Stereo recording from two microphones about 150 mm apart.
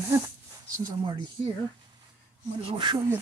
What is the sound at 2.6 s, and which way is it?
Speech, 35° right (ahead or behind).